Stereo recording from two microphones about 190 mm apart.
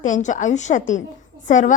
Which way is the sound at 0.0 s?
40° left (ahead or behind).